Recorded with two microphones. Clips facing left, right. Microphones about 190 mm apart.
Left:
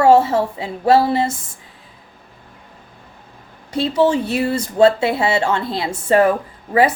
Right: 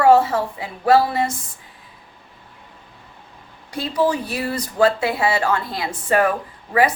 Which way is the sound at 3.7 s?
25° left (ahead or behind).